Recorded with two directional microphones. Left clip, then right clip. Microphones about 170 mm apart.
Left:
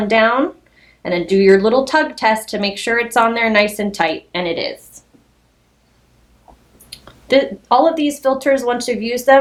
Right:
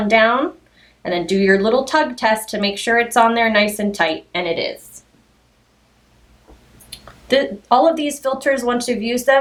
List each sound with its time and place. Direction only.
0.1 s speech: 45° left (ahead or behind)
4.9 s a sound: 45° left (ahead or behind)
6.9 s speech: 45° left (ahead or behind)